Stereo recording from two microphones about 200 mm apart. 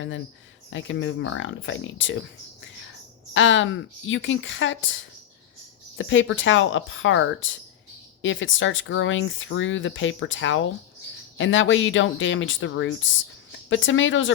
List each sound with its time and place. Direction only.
0.7 s speech: 70° left (ahead or behind)
3.3 s speech: 70° left (ahead or behind)